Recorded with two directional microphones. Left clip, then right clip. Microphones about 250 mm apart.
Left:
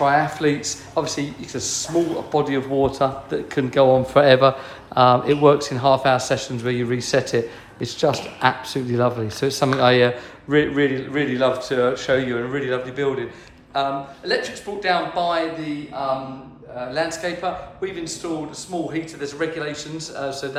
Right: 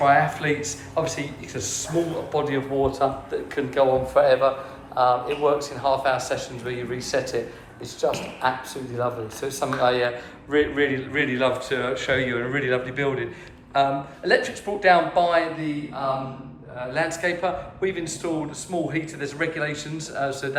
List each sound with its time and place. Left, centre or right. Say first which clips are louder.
0.0 s speech: left 1 dB; centre
16.9 s speech: even; centre